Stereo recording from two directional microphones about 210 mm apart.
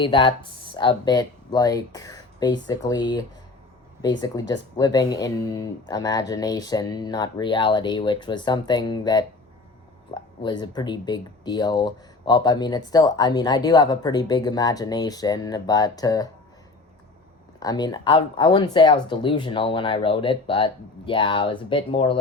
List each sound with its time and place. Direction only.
0.0 s speech: 25° left (ahead or behind)
17.6 s speech: 20° left (ahead or behind)